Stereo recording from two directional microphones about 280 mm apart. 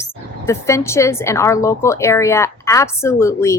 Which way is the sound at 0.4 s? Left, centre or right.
Centre.